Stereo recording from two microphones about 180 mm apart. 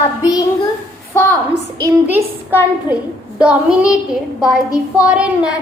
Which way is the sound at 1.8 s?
10° right (ahead or behind).